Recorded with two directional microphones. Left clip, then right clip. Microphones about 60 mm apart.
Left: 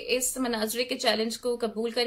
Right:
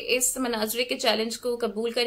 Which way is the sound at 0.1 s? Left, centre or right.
Right.